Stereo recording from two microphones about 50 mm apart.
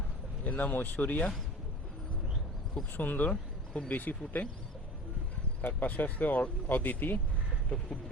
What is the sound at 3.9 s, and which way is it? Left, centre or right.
Speech, left.